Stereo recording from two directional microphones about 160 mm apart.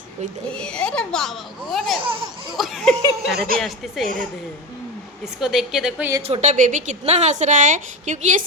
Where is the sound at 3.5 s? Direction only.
Centre (ahead or behind).